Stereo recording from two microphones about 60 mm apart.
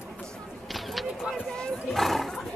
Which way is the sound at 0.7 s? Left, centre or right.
Centre.